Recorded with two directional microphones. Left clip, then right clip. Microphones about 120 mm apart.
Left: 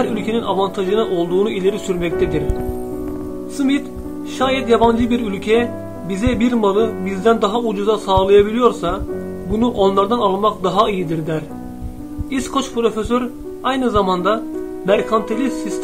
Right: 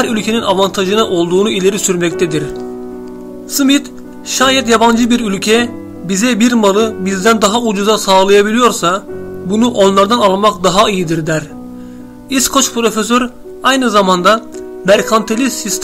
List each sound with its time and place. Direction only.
0.0 s speech: 25° right (ahead or behind)
3.5 s speech: 35° right (ahead or behind)
15.2 s speech: 20° right (ahead or behind)